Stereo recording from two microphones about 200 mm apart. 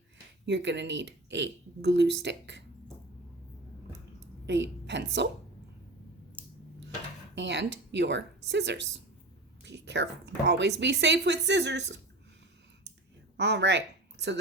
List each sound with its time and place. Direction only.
0.4 s a woman's voice: 60° right (ahead or behind)
4.4 s a woman's voice: 60° right (ahead or behind)
7.3 s a woman's voice: 60° right (ahead or behind)
13.3 s speech: 60° right (ahead or behind)